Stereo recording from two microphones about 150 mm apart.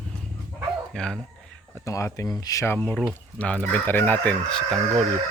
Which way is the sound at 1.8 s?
20° left (ahead or behind).